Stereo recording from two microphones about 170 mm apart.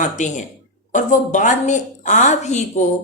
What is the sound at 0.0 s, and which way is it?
Speech, 45° left (ahead or behind).